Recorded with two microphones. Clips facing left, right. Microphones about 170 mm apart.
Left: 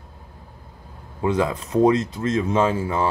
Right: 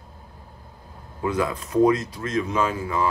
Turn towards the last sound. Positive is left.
turn(degrees=30)  # may be behind; listen again after turning